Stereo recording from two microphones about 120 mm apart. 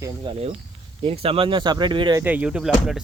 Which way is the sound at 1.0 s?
50° right (ahead or behind).